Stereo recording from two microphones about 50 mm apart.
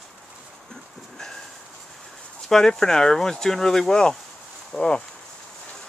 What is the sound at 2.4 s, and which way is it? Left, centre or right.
Speech, centre.